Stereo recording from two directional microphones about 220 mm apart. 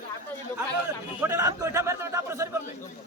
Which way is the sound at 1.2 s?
10° right (ahead or behind).